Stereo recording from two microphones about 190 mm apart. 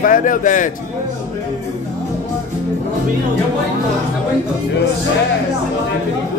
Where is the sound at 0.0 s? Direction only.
45° left (ahead or behind).